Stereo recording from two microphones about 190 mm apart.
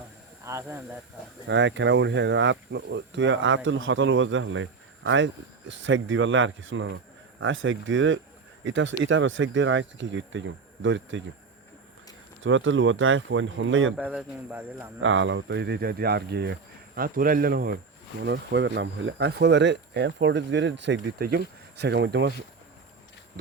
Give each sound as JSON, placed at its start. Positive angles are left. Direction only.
{"t": 0.4, "sound": "a man's voice", "side_deg": -15}
{"t": 1.5, "sound": "speech", "side_deg": -70}
{"t": 8.6, "sound": "speech", "side_deg": -75}
{"t": 12.4, "sound": "speech", "side_deg": -80}
{"t": 13.9, "sound": "a man's voice", "side_deg": -5}
{"t": 15.0, "sound": "speech", "side_deg": -85}
{"t": 18.2, "sound": "speech", "side_deg": -65}